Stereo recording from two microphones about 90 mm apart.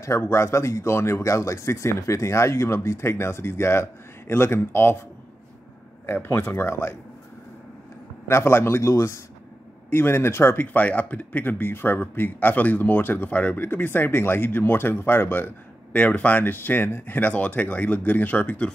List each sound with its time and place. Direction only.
0.0 s speech: 30° left (ahead or behind)
6.0 s speech: 25° left (ahead or behind)
8.3 s speech: 30° left (ahead or behind)